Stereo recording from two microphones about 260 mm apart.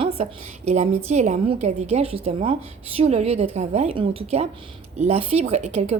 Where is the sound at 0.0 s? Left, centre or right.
Right.